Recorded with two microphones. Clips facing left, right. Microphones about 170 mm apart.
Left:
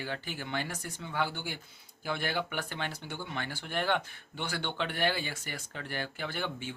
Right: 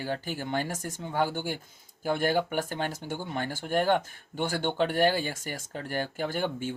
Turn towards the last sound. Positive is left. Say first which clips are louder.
# right 6 dB
turn(degrees=-45)  # may be behind; listen again after turning